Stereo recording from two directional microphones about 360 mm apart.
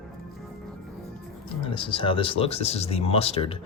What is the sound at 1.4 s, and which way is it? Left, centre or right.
Speech, centre.